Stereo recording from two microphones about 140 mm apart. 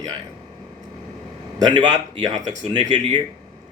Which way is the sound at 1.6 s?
30° right (ahead or behind).